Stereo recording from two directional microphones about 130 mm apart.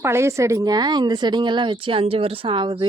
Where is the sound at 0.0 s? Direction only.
20° right (ahead or behind).